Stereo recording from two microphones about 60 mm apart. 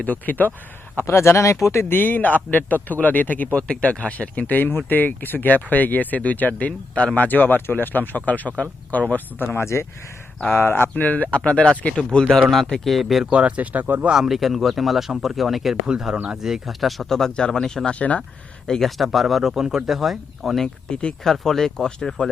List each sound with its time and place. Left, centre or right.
0.0 s a man's voice: left
1.0 s speech: left
1.8 s a man's voice: left; by 7.3 s centre
7.3 s speech: left
10.9 s a man's voice: left
12.8 s speech: centre
13.3 s speech: right
14.1 s speech: centre
20.9 s speech: centre
21.2 s speech: centre